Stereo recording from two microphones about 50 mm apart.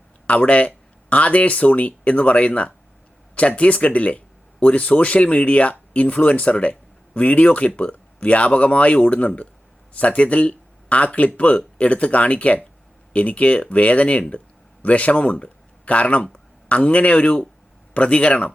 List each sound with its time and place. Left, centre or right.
0.3 s speech: left